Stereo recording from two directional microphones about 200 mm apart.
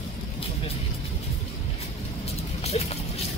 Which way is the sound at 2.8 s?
30° left (ahead or behind).